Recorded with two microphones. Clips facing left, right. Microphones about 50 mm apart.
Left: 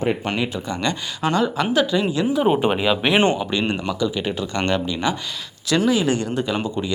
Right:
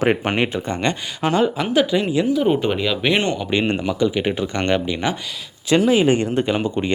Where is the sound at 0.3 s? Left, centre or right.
Right.